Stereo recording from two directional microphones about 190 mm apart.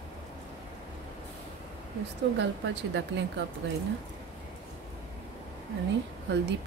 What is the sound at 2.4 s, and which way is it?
Speech, 65° right (ahead or behind).